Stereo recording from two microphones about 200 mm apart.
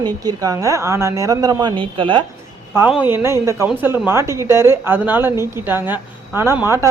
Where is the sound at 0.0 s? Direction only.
20° right (ahead or behind).